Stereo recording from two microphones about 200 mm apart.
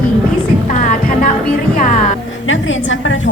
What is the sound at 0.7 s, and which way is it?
Music, 40° left (ahead or behind).